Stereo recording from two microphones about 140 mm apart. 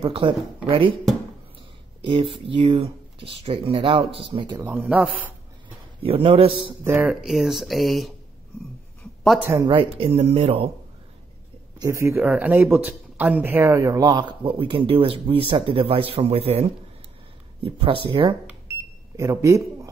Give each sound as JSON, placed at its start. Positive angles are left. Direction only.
{"t": 0.0, "sound": "speech", "side_deg": -40}
{"t": 2.0, "sound": "speech", "side_deg": -40}
{"t": 4.6, "sound": "a man's voice", "side_deg": -15}
{"t": 6.0, "sound": "speech", "side_deg": -40}
{"t": 6.8, "sound": "speech", "side_deg": -15}
{"t": 9.6, "sound": "speech", "side_deg": -35}
{"t": 11.8, "sound": "a man's voice", "side_deg": -20}
{"t": 17.6, "sound": "speech", "side_deg": -40}
{"t": 19.1, "sound": "speech", "side_deg": -25}